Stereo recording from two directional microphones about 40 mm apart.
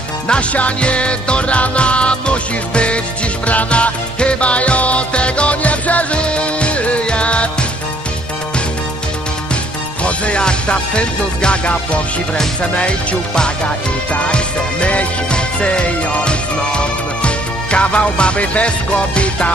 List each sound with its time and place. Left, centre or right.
0.3 s music: left
10.0 s music: left